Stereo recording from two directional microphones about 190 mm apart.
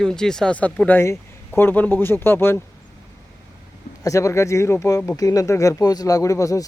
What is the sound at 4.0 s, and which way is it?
Speech, 15° left (ahead or behind).